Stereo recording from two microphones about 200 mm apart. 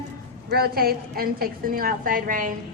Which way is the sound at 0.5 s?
50° right (ahead or behind).